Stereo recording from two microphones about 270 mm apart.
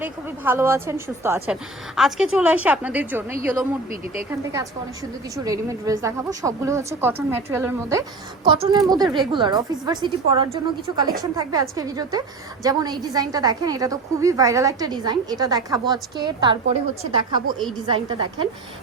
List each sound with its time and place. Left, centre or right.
0.0 s a woman's voice: centre
17.8 s a woman's voice: centre